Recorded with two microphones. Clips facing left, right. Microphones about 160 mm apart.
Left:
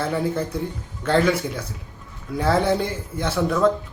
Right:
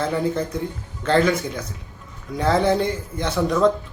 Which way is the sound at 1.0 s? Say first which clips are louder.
Right 1 dB; 10° left (ahead or behind).